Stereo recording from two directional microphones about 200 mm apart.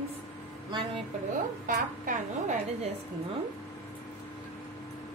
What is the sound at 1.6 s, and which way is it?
Speech, 40° right (ahead or behind).